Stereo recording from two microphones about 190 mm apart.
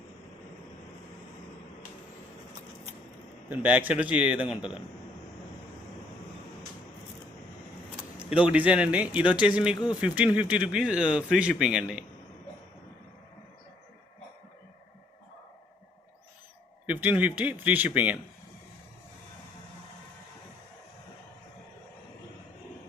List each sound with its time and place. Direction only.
3.5 s speech: 10° right (ahead or behind)
8.4 s speech: 5° right (ahead or behind)
9.7 s a man's voice: 20° left (ahead or behind)
10.0 s speech: 5° right (ahead or behind)
16.8 s speech: 10° right (ahead or behind)